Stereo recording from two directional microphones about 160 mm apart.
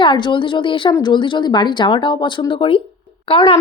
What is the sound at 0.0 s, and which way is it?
Speech, 30° left (ahead or behind).